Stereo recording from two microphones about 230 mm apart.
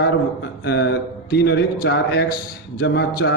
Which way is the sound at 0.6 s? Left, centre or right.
Left.